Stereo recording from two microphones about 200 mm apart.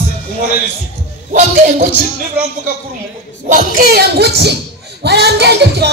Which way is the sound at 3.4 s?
45° right (ahead or behind).